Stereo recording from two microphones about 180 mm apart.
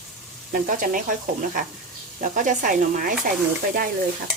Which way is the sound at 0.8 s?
50° right (ahead or behind).